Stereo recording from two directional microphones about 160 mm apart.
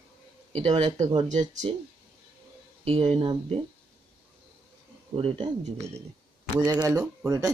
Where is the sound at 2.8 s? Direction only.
40° right (ahead or behind).